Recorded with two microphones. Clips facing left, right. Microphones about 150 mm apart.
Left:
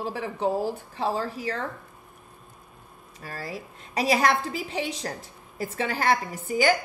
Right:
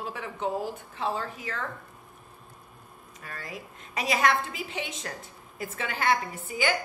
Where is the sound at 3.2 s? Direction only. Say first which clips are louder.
Left 5 dB; 35° left (ahead or behind).